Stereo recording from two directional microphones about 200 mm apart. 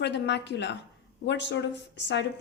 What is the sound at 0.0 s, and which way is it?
A woman's voice, 60° left (ahead or behind).